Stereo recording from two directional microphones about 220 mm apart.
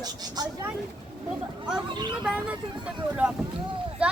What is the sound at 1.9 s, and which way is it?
Speech, 20° right (ahead or behind).